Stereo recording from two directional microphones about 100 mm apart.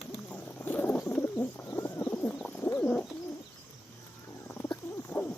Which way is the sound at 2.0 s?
10° left (ahead or behind).